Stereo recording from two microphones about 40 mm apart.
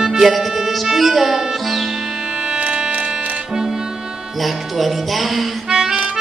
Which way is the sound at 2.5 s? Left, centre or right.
Right.